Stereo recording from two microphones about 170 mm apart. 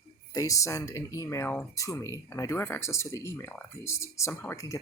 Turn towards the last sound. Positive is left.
turn(degrees=15)  # may be behind; listen again after turning